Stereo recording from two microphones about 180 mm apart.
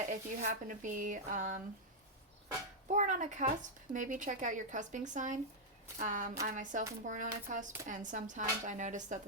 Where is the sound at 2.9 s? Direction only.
45° right (ahead or behind).